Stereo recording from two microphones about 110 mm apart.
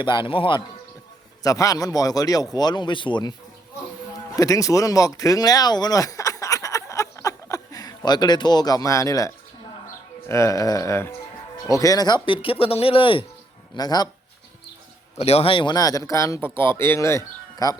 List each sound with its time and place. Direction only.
0.0 s speech: 50° left (ahead or behind)
1.5 s speech: 30° left (ahead or behind)
4.4 s speech: 30° left (ahead or behind); by 13.2 s 50° left (ahead or behind)
13.7 s speech: 35° left (ahead or behind)
15.2 s a man's voice: 70° left (ahead or behind); by 15.7 s 50° left (ahead or behind)
15.7 s speech: 35° left (ahead or behind)